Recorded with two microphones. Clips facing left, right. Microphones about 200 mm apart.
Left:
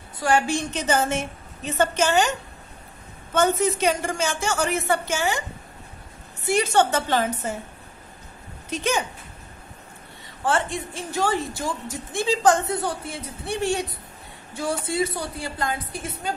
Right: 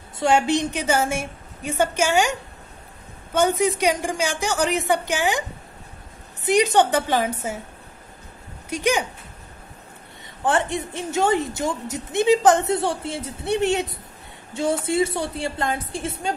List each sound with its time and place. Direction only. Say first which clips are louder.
0.2 s a woman's voice: right 3 dB; 20° right (ahead or behind)
3.3 s a woman's voice: right 1 dB; 15° right (ahead or behind)
6.4 s a woman's voice: right 3 dB; 15° right (ahead or behind)
8.6 s speech: right 3 dB; 15° right (ahead or behind)
10.4 s a woman's voice: right 2 dB; 20° right (ahead or behind)